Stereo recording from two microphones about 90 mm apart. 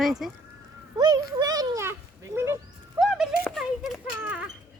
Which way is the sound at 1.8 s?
30° right (ahead or behind).